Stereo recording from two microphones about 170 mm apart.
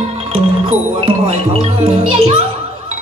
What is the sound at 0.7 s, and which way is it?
A child's voice, 35° right (ahead or behind).